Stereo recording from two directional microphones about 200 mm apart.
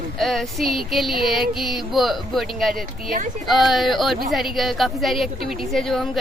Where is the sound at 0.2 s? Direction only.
Centre (ahead or behind).